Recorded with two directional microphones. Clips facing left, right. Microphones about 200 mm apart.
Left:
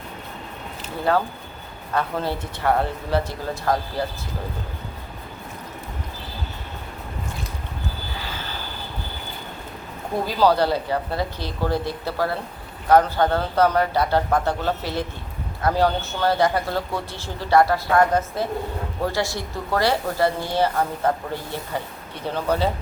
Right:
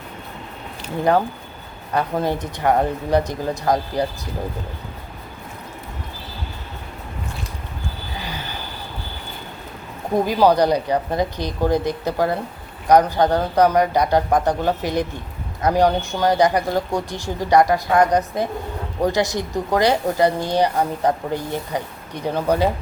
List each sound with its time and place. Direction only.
2.0 s speech: 15° right (ahead or behind)
10.2 s speech: 15° right (ahead or behind)